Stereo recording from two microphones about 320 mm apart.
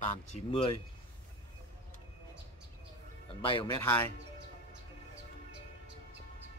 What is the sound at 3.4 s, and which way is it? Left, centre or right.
Speech, centre.